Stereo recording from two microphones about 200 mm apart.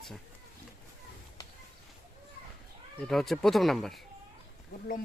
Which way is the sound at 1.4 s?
20° left (ahead or behind).